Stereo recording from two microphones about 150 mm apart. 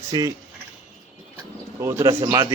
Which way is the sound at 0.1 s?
25° right (ahead or behind).